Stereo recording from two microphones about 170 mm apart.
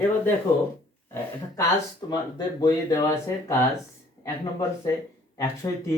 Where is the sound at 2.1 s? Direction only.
25° left (ahead or behind).